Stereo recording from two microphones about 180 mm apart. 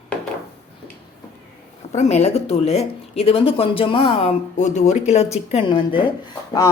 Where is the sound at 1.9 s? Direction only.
40° left (ahead or behind).